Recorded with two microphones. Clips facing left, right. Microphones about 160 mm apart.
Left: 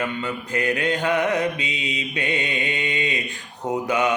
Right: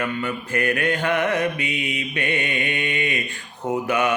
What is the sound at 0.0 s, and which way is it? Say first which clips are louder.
Mantra: right 1 dB; 20° left (ahead or behind).